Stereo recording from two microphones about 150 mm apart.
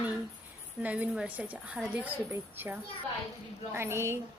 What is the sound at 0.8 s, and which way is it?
A woman's voice, 10° right (ahead or behind).